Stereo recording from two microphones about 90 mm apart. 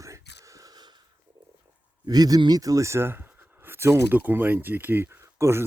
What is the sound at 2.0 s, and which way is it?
Speech, 45° right (ahead or behind).